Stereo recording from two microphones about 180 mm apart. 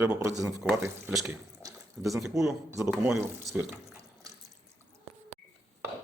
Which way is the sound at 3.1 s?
10° right (ahead or behind).